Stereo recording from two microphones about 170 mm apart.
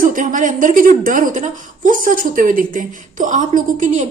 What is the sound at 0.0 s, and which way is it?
A woman's voice, 50° right (ahead or behind).